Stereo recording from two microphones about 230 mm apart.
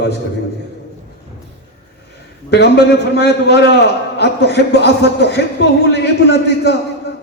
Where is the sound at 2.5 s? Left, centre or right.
Left.